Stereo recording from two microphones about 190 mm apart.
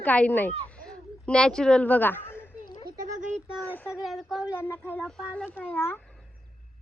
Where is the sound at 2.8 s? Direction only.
40° right (ahead or behind).